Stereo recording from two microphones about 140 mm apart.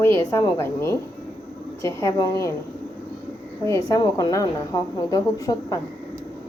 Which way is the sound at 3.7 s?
25° left (ahead or behind).